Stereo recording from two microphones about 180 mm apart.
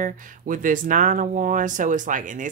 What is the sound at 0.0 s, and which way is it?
Speech, 50° right (ahead or behind).